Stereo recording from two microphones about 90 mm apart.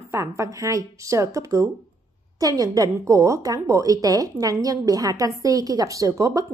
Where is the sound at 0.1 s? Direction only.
30° right (ahead or behind).